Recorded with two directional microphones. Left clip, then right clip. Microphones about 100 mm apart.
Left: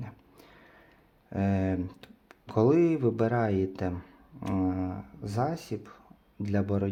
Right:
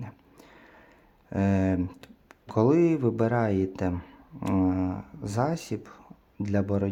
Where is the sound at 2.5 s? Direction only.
20° right (ahead or behind); by 5.9 s 35° right (ahead or behind).